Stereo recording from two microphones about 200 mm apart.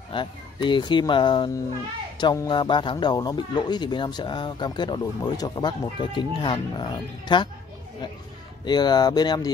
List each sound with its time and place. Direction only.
0.1 s speech: 25° left (ahead or behind)
8.6 s speech: 20° left (ahead or behind)